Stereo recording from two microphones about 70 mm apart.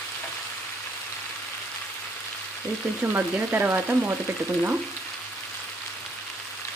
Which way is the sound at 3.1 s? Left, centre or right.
Right.